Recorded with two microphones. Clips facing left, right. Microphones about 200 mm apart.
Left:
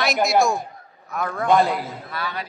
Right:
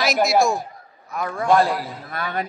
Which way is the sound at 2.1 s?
50° right (ahead or behind).